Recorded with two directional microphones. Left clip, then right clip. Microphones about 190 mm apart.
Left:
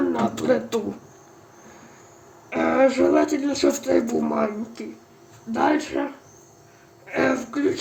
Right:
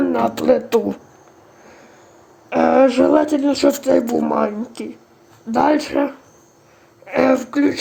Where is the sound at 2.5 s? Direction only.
40° right (ahead or behind).